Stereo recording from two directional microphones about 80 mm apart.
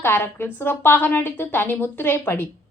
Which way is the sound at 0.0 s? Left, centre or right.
Left.